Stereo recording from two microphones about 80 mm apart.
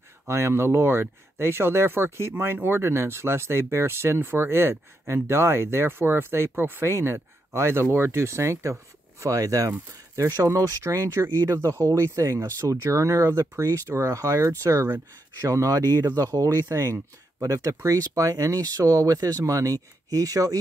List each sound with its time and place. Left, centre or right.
0.3 s speech: right